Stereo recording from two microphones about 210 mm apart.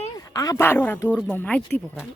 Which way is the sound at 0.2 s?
15° left (ahead or behind).